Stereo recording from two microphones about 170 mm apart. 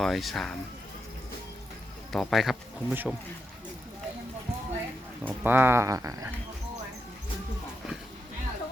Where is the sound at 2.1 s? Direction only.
Centre (ahead or behind).